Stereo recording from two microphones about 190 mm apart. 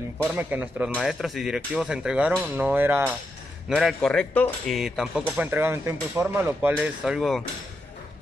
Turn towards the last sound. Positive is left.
turn(degrees=0)  # may be behind; listen again after turning